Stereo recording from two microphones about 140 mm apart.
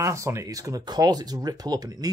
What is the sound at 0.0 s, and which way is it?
Speech, 20° right (ahead or behind).